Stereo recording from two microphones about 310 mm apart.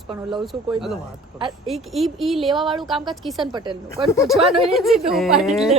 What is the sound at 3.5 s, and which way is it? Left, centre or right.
Speech, centre.